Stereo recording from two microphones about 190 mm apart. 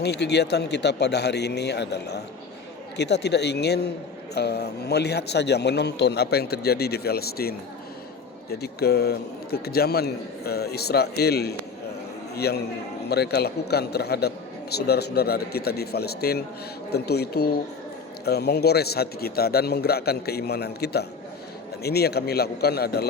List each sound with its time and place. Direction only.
0.0 s speech: 60° left (ahead or behind)
8.6 s speech: 55° left (ahead or behind)